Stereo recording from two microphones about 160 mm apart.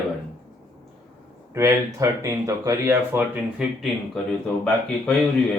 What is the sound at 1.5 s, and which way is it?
Speech, 20° right (ahead or behind).